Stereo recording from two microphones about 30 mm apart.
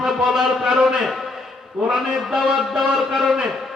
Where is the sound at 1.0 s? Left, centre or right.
Centre.